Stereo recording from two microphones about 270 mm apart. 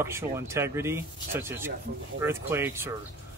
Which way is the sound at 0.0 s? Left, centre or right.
Centre.